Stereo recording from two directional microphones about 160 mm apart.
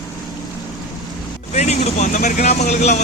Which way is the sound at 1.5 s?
45° left (ahead or behind).